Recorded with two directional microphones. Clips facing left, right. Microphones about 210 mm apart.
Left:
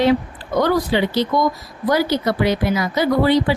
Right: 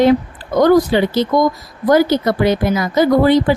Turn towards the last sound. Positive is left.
turn(degrees=-50)  # may be behind; listen again after turning